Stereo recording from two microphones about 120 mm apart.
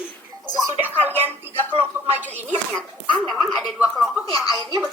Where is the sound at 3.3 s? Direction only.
Centre (ahead or behind).